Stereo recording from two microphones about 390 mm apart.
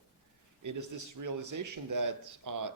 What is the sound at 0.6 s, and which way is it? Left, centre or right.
Speech, right.